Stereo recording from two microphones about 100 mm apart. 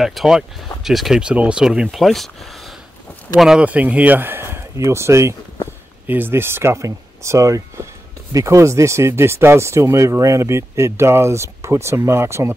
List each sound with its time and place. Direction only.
0.0 s speech: 5° right (ahead or behind)
3.3 s speech: 5° right (ahead or behind); by 12.5 s 25° right (ahead or behind)